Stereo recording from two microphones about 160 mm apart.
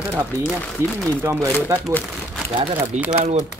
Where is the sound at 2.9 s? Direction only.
45° right (ahead or behind).